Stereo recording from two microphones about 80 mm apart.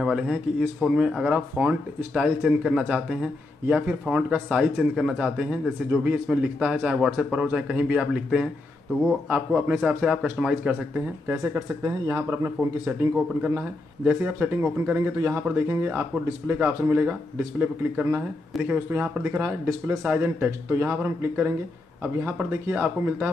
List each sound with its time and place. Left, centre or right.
0.0 s speech: centre
3.6 s speech: right
4.1 s speech: centre
11.2 s speech: right
13.4 s speech: centre
18.5 s speech: centre
18.9 s speech: right